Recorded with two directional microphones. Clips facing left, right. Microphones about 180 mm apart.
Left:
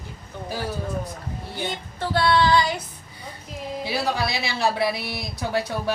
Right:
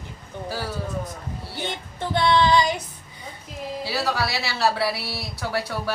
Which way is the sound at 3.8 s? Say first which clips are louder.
Left 1 dB; 20° left (ahead or behind).